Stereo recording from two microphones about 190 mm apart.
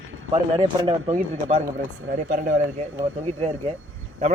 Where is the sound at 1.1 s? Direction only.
45° right (ahead or behind).